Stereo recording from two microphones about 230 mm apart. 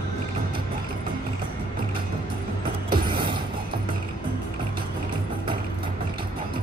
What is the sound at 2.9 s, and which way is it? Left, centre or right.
Mechanisms, right.